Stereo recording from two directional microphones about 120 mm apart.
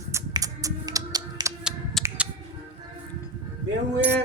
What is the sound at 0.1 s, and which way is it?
Typing, 30° right (ahead or behind).